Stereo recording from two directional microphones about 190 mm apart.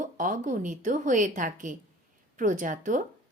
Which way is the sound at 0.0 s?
45° right (ahead or behind).